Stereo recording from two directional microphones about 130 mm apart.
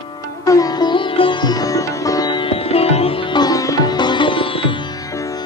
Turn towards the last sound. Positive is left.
turn(degrees=45)  # may be behind; listen again after turning